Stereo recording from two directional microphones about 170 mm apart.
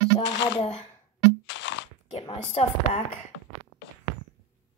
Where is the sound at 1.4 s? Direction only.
90° left.